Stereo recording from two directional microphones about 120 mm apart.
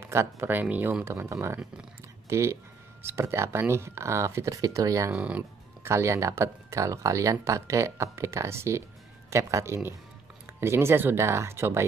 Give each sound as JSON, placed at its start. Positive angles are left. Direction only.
{"t": 0.1, "sound": "speech", "side_deg": -20}
{"t": 5.1, "sound": "speech", "side_deg": -10}
{"t": 5.9, "sound": "speech", "side_deg": -25}